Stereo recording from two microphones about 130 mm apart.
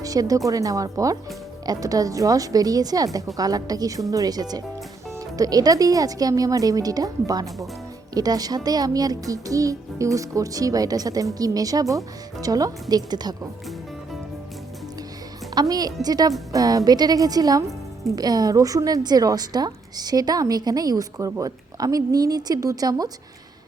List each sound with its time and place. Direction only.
0.0 s a child's voice: 25° right (ahead or behind)
15.5 s a child's voice: 30° right (ahead or behind)